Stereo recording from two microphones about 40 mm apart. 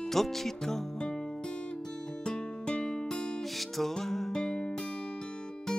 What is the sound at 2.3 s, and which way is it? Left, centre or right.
Music, left.